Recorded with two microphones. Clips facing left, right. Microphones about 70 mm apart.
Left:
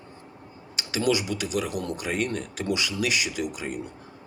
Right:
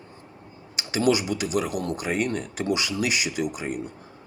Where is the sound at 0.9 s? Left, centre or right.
Centre.